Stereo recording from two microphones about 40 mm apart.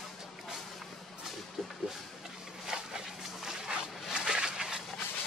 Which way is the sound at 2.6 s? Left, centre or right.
Centre.